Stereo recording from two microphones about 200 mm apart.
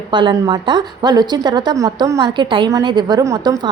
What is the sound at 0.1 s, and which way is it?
A woman's voice, 25° right (ahead or behind).